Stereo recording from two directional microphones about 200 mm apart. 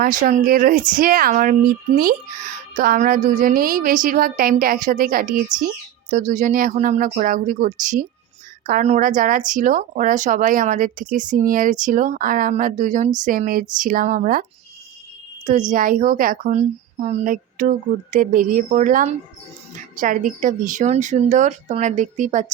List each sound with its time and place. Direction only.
0.0 s a woman's voice: 40° right (ahead or behind)
15.7 s speech: 40° right (ahead or behind)